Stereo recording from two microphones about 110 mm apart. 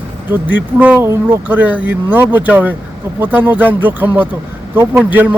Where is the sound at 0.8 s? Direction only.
15° right (ahead or behind).